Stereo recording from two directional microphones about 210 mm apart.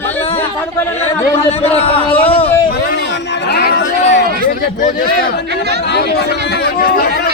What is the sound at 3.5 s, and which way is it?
Chatter, 55° left (ahead or behind).